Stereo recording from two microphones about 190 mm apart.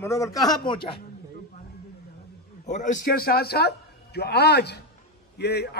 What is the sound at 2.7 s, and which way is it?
A man's voice, 40° left (ahead or behind).